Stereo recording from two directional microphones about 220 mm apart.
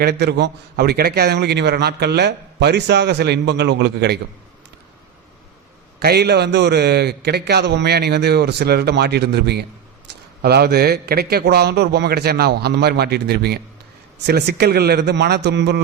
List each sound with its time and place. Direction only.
0.0 s a man's voice: 45° right (ahead or behind)
6.0 s a man's voice: 45° right (ahead or behind)